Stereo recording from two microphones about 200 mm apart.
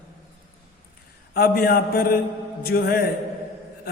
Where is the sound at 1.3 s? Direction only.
50° left (ahead or behind).